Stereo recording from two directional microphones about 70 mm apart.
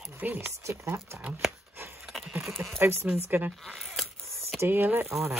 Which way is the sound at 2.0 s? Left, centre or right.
Centre.